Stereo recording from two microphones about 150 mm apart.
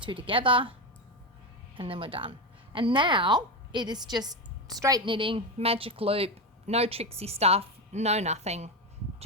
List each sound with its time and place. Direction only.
0.0 s a woman's voice: 35° right (ahead or behind)
1.7 s a woman's voice: 35° right (ahead or behind)